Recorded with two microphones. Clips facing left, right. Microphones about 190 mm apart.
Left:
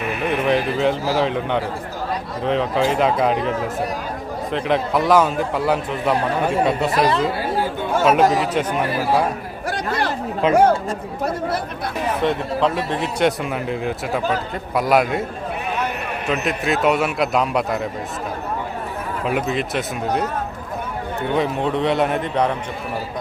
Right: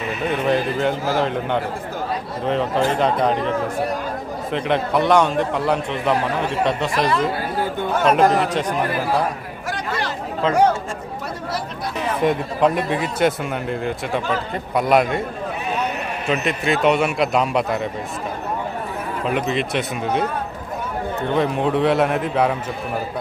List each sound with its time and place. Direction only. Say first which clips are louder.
0.2 s speech: even; centre (ahead or behind)
4.5 s speech: even; centre (ahead or behind)
10.4 s speech: left 4 dB; 15° left (ahead or behind)
12.2 s speech: right 2 dB; 15° right (ahead or behind); by 15.2 s centre (ahead or behind)
16.2 s speech: right 1 dB; centre (ahead or behind)
19.2 s speech: even; 5° left (ahead or behind)
21.3 s speech: right 1 dB; centre (ahead or behind)